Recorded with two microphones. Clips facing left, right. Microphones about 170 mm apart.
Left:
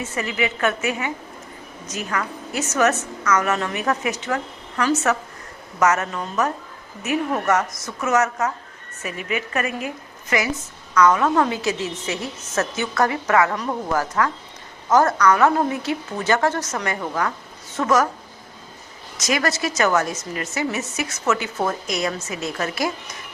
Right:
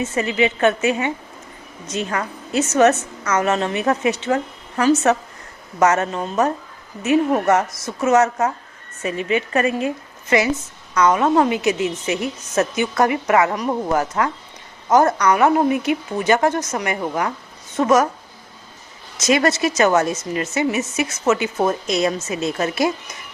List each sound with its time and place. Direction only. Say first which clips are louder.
0.0 s a woman's voice: right 5 dB; 25° right (ahead or behind)
19.1 s a woman's voice: right 5 dB; 25° right (ahead or behind)